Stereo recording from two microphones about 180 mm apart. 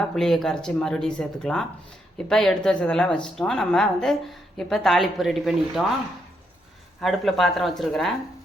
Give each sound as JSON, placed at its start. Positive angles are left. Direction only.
{"t": 0.2, "sound": "a woman's voice", "side_deg": 0}
{"t": 7.0, "sound": "a woman's voice", "side_deg": 0}